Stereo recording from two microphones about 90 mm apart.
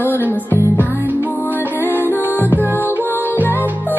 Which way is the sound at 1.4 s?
20° left (ahead or behind).